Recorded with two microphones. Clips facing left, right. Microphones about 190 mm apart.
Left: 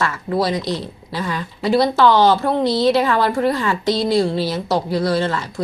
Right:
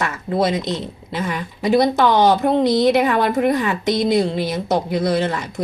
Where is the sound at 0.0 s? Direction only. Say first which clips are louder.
Even; 20° right (ahead or behind).